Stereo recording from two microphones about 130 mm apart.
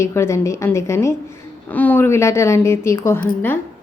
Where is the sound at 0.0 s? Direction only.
20° left (ahead or behind).